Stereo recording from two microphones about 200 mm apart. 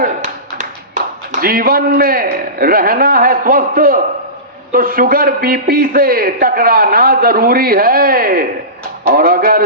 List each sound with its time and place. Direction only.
0.0 s a man's voice: 40° right (ahead or behind)